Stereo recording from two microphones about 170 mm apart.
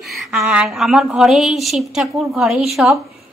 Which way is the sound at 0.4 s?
5° right (ahead or behind).